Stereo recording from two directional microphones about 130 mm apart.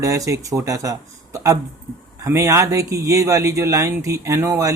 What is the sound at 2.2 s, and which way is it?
Speech, 25° right (ahead or behind).